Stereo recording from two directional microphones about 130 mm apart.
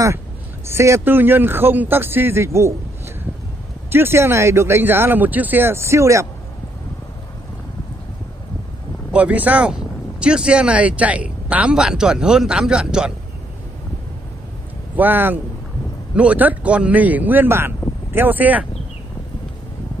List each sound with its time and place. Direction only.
0.7 s speech: 20° right (ahead or behind)
3.9 s speech: 20° right (ahead or behind)
9.1 s speech: 10° right (ahead or behind)
15.0 s speech: 15° right (ahead or behind)